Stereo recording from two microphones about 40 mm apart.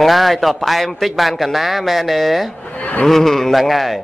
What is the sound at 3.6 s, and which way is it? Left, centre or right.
Speech, centre.